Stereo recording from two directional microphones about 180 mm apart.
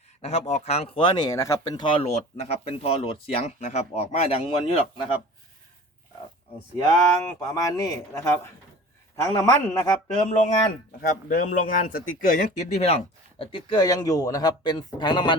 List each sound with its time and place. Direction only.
0.2 s speech: 40° left (ahead or behind)
6.7 s speech: 20° left (ahead or behind)
9.2 s speech: 20° left (ahead or behind)
10.2 s speech: 40° left (ahead or behind); by 15.4 s 25° left (ahead or behind)